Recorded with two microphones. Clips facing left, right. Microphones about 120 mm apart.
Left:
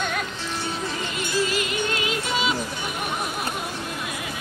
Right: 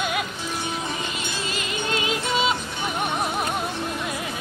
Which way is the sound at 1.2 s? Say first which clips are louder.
Left 6 dB; 20° right (ahead or behind).